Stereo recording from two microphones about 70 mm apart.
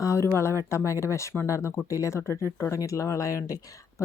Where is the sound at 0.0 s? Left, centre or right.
Left.